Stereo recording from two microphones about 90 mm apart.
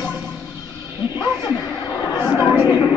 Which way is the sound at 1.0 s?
55° left (ahead or behind).